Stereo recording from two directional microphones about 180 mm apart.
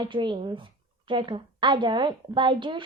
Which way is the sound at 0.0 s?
25° right (ahead or behind).